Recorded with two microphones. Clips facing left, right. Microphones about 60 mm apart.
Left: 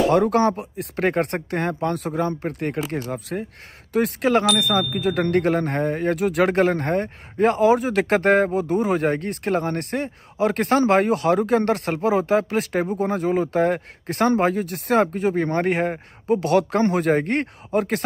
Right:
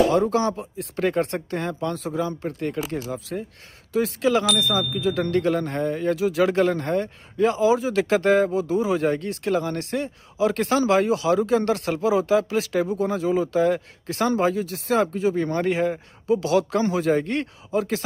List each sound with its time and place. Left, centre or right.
0.1 s speech: left
0.9 s speech: left
2.0 s speech: left